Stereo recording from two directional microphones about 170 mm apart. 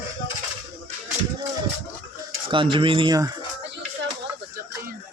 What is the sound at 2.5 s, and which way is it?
Speech, 30° right (ahead or behind).